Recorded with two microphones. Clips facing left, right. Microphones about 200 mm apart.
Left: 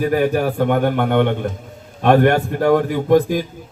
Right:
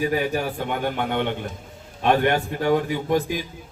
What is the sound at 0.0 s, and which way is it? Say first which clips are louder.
A man's voice: left 6 dB; 50° left (ahead or behind).